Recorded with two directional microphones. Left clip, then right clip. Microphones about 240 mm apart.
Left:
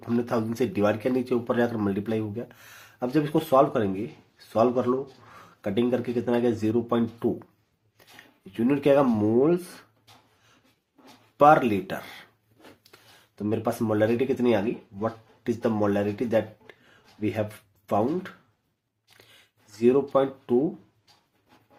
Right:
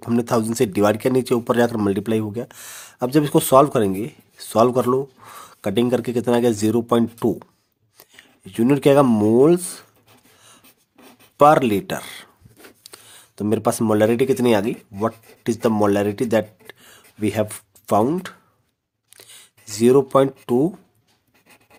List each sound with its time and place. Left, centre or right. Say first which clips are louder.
0.0 s speech: right 7 dB; right
11.3 s speech: right 4 dB; right
19.8 s speech: right 7 dB; right